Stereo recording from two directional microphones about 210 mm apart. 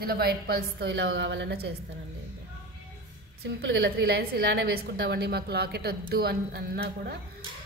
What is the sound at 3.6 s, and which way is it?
A woman's voice, 55° right (ahead or behind).